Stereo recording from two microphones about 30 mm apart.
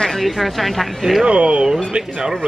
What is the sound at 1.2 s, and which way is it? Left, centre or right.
Speech, right.